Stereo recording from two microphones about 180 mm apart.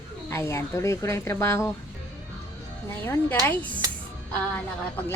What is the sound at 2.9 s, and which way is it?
Speech, 10° left (ahead or behind).